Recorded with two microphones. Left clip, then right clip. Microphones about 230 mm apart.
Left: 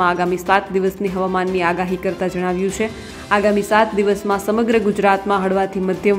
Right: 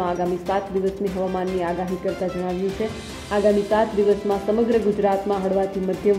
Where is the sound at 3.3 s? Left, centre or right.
Centre.